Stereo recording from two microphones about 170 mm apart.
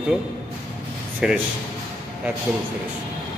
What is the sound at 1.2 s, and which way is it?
Speech, 5° right (ahead or behind).